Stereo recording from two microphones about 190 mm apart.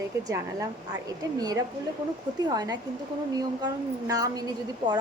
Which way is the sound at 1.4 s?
20° right (ahead or behind).